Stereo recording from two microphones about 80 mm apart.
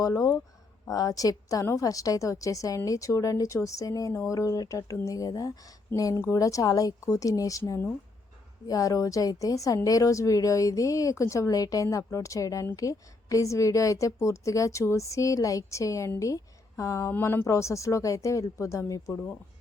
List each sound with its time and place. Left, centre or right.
0.0 s speech: left
6.0 s speech: left
8.6 s a woman's voice: left